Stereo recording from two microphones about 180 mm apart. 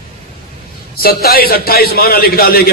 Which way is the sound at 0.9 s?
55° left (ahead or behind).